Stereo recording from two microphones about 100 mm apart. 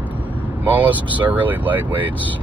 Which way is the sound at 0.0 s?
15° right (ahead or behind).